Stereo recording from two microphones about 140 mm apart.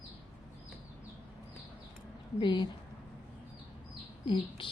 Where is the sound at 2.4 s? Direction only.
35° left (ahead or behind).